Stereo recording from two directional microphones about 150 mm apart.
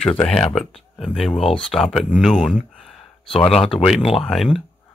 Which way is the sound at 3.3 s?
40° left (ahead or behind).